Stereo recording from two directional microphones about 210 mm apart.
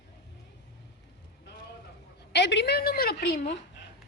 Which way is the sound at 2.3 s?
55° left (ahead or behind).